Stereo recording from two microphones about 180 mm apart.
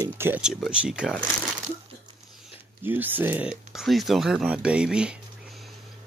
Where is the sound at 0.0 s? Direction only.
10° right (ahead or behind).